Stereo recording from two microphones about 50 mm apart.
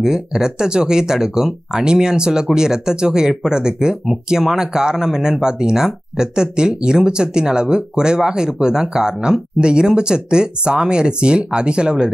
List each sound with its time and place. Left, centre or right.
0.0 s speech: centre